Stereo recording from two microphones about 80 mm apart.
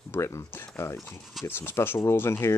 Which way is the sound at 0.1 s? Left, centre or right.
Left.